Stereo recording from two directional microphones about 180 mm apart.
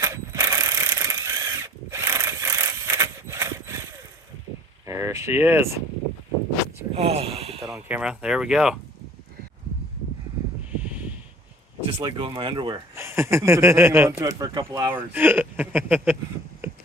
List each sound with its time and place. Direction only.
0.0 s mechanisms: 20° right (ahead or behind)
4.9 s speech: 15° right (ahead or behind)
6.9 s speech: 35° right (ahead or behind)
7.6 s speech: 5° right (ahead or behind)
11.9 s speech: 30° right (ahead or behind); by 16.1 s 10° right (ahead or behind)
16.6 s gears: 15° right (ahead or behind)